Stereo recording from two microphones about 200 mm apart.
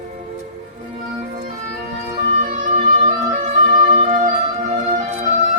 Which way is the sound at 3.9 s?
35° right (ahead or behind).